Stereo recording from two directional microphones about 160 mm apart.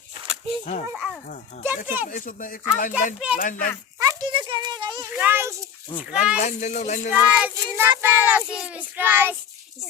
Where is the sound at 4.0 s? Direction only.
25° right (ahead or behind).